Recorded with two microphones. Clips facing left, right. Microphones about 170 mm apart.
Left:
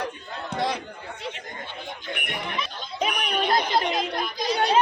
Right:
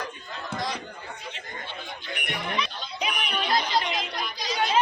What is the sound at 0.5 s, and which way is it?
Chatter, 60° left (ahead or behind).